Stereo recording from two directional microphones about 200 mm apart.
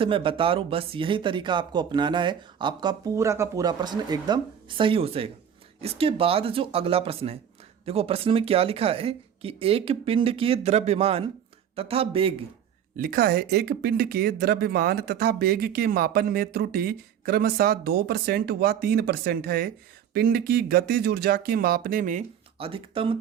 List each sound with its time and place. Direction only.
0.0 s speech: 25° right (ahead or behind)
13.0 s speech: 50° right (ahead or behind)
22.5 s speech: 25° right (ahead or behind)